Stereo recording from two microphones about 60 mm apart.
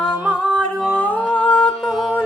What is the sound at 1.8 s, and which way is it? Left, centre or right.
Music, centre.